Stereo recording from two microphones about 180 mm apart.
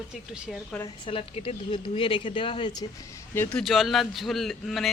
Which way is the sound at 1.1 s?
30° left (ahead or behind).